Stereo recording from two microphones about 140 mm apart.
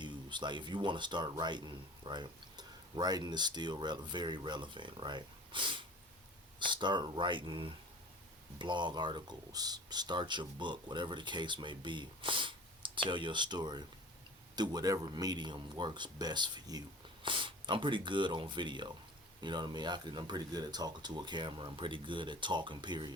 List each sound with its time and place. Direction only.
0.0 s a man's voice: 35° right (ahead or behind)